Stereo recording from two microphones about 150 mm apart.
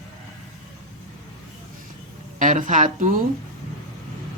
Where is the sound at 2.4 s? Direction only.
60° right (ahead or behind).